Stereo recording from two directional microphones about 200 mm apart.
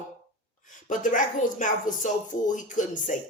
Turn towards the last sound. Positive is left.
turn(degrees=40)  # may be behind; listen again after turning